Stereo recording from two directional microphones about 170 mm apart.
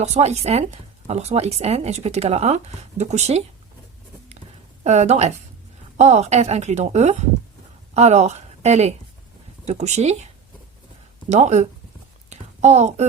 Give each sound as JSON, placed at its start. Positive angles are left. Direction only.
{"t": 0.0, "sound": "speech", "side_deg": -40}
{"t": 4.8, "sound": "speech", "side_deg": -40}
{"t": 11.3, "sound": "speech", "side_deg": -40}
{"t": 12.3, "sound": "a sound", "side_deg": -40}